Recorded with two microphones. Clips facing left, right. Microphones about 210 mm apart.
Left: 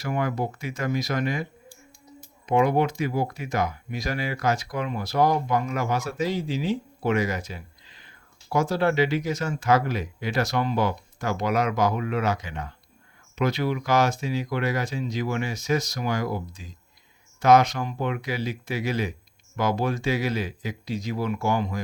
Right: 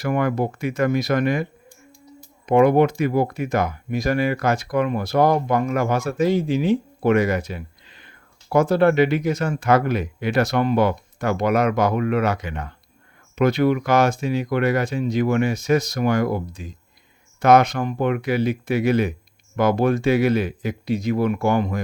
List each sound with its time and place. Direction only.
0.0 s speech: 60° right (ahead or behind)
2.5 s speech: 55° right (ahead or behind)